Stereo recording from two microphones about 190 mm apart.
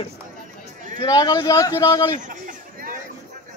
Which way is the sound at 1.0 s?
20° left (ahead or behind).